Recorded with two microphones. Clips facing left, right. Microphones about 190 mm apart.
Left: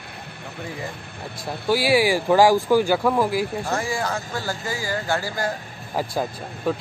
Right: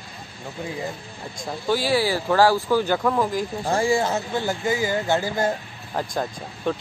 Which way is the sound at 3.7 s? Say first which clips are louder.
Right 4 dB; 25° right (ahead or behind).